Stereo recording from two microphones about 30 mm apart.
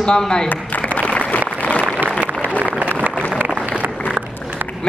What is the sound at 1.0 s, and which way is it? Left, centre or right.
Applause, left.